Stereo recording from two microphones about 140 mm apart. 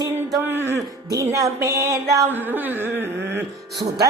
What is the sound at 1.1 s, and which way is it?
Music, 25° right (ahead or behind).